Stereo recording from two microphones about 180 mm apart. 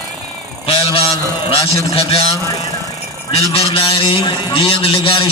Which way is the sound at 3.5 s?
30° left (ahead or behind).